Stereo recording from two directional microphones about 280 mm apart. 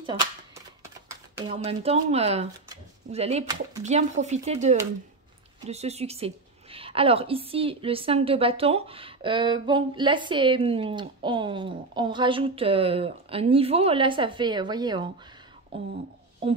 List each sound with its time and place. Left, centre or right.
1.3 s a woman's voice: centre